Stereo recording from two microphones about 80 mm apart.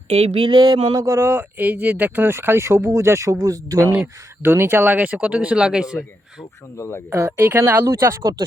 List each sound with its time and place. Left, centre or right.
0.3 s a sound: right
1.0 s speech: right
4.0 s speech: right; by 6.0 s centre
6.7 s speech: left
7.1 s speech: right
7.9 s speech: right